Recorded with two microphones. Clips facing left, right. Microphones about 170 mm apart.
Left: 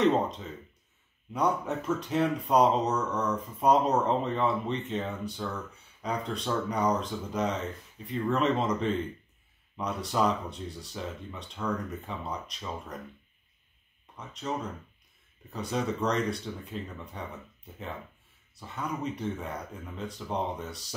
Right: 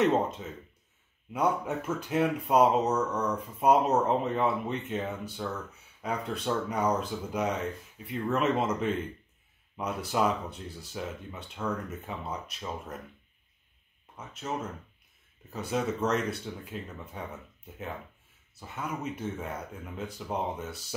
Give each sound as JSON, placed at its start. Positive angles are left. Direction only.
{"t": 0.0, "sound": "speech", "side_deg": -5}
{"t": 1.7, "sound": "speech", "side_deg": -10}
{"t": 14.1, "sound": "speech", "side_deg": -5}
{"t": 15.5, "sound": "speech", "side_deg": -5}
{"t": 18.6, "sound": "speech", "side_deg": -5}